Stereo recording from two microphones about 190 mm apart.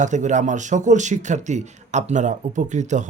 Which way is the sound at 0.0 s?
40° right (ahead or behind).